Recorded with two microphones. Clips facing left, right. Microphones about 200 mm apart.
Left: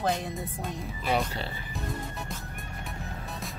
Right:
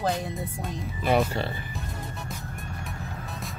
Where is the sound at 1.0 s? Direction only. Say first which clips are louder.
Right 5 dB; 55° right (ahead or behind).